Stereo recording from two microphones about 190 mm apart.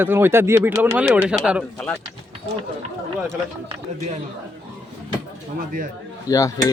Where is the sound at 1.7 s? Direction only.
5° left (ahead or behind).